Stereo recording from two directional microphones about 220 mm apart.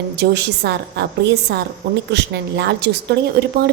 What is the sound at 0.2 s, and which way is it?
A woman's voice, 50° right (ahead or behind).